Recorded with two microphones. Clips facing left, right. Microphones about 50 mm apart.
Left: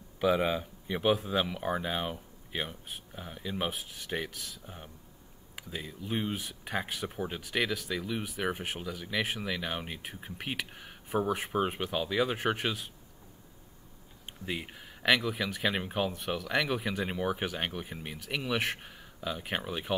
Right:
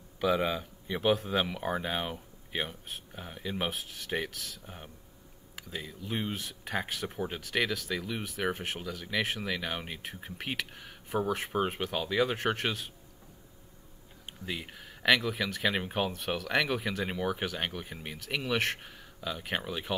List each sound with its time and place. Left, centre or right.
0.2 s speech: centre
4.6 s speech: centre
5.6 s speech: centre
14.4 s speech: centre